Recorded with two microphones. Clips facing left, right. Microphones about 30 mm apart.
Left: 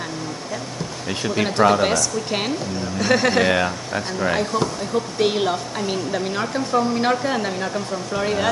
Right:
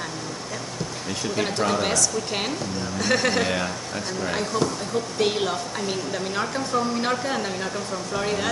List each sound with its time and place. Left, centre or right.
1.3 s speech: centre
3.4 s speech: left
4.4 s speech: centre